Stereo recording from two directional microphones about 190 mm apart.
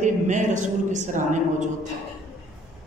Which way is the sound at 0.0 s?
40° right (ahead or behind).